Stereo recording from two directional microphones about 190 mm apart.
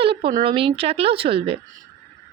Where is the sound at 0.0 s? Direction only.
30° right (ahead or behind).